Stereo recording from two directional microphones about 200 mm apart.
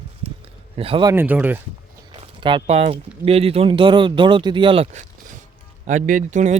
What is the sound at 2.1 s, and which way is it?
A man's voice, 25° right (ahead or behind).